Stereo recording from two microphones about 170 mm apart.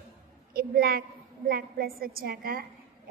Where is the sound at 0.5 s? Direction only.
60° right (ahead or behind).